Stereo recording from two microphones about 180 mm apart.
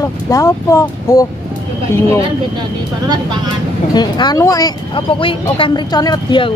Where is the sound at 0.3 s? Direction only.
20° left (ahead or behind).